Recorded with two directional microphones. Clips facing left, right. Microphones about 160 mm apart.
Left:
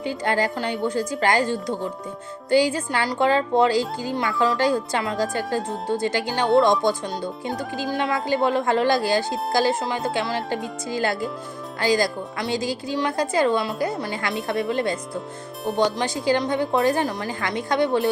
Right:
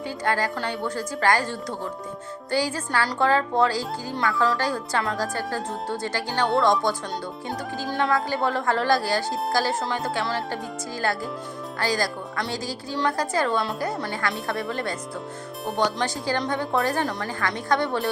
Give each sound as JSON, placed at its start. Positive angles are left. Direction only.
{"t": 0.0, "sound": "a woman's voice", "side_deg": 20}
{"t": 7.9, "sound": "a woman's voice", "side_deg": 20}
{"t": 16.0, "sound": "a woman's voice", "side_deg": 15}